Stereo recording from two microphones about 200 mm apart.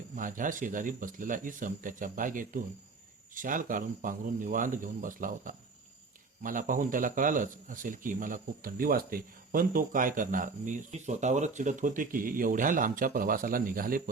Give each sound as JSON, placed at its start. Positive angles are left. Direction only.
{"t": 0.2, "sound": "a man's voice", "side_deg": -40}